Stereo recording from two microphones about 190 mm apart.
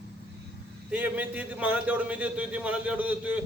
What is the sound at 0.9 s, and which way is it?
A man's voice, 10° right (ahead or behind).